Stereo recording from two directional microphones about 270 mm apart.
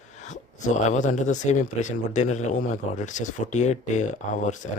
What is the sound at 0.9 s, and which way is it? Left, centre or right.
Speech, left.